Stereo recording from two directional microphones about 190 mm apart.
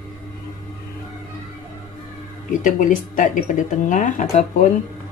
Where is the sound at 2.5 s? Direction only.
45° left (ahead or behind).